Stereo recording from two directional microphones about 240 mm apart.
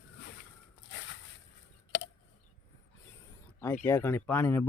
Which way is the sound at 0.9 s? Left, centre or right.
Left.